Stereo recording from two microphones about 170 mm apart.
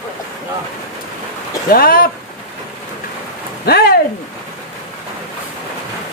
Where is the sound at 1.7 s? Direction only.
60° left (ahead or behind).